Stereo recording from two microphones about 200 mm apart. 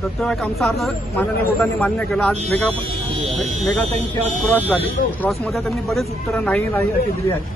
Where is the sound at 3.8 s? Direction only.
30° right (ahead or behind).